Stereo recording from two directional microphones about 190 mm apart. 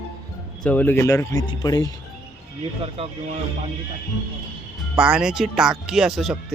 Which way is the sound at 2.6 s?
30° right (ahead or behind).